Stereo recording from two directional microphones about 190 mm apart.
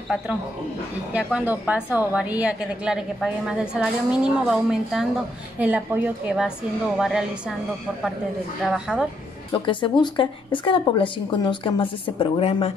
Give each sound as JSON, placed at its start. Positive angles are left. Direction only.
{"t": 1.1, "sound": "a woman's voice", "side_deg": -5}
{"t": 8.6, "sound": "a woman's voice", "side_deg": -5}
{"t": 9.5, "sound": "speech", "side_deg": 25}